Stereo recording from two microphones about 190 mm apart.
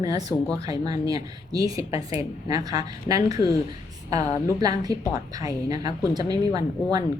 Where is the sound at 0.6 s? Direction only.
20° right (ahead or behind).